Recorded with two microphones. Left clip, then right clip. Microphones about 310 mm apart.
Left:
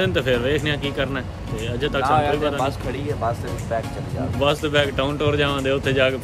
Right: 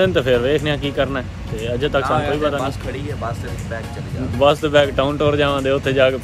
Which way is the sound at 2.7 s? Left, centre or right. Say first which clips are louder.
Even; centre.